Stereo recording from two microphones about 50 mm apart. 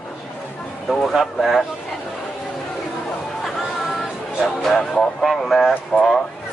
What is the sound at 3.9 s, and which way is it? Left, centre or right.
A man's voice, centre.